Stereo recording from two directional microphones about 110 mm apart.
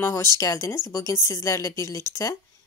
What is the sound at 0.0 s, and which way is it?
Speech, 25° left (ahead or behind).